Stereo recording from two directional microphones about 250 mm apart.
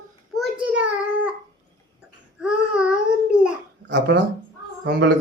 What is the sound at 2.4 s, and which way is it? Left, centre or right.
Babbling, centre.